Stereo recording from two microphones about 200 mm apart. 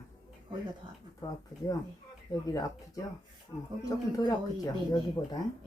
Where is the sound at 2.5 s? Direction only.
15° left (ahead or behind).